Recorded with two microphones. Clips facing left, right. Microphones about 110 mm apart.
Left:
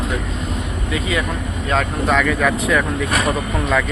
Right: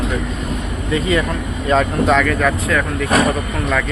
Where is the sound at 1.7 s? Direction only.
Centre (ahead or behind).